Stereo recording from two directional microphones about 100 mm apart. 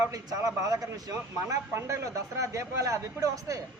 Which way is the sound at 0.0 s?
35° right (ahead or behind).